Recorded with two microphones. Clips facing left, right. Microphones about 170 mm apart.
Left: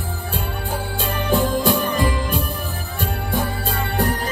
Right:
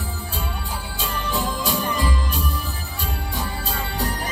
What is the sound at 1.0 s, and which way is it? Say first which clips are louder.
Music: left 6 dB; 55° left (ahead or behind).